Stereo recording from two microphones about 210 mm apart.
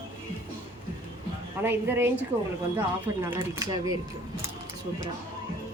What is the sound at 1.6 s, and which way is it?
Speech, 10° right (ahead or behind).